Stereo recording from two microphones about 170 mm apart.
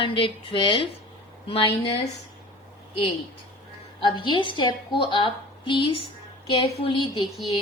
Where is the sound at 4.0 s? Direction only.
30° left (ahead or behind).